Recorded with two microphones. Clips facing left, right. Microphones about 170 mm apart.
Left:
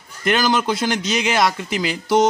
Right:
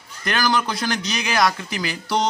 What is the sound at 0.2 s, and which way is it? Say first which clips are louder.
A man's voice: left 3 dB; 20° left (ahead or behind).